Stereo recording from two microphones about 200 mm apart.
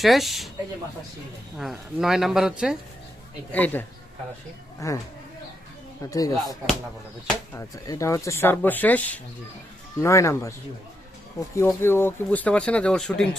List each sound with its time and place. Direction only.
0.0 s speech: centre (ahead or behind)
1.5 s speech: centre (ahead or behind)
3.5 s speech: 10° left (ahead or behind)
6.1 s speech: 20° left (ahead or behind)
7.5 s speech: 15° left (ahead or behind)